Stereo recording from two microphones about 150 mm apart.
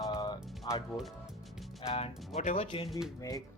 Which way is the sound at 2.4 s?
50° left (ahead or behind).